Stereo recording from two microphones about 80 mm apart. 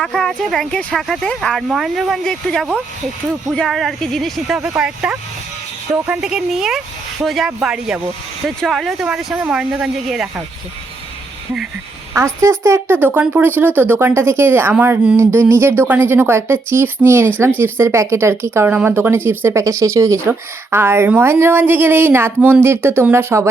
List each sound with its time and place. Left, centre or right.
0.0 s speech: centre
0.7 s speech: centre
3.7 s speech: centre
4.4 s a woman's voice: centre
9.5 s a woman's voice: centre
12.1 s a woman's voice: right